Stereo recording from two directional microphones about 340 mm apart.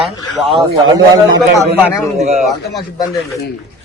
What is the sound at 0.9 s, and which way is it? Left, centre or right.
Speech, centre.